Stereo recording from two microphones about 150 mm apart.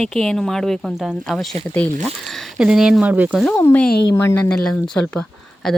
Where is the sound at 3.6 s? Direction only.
10° left (ahead or behind).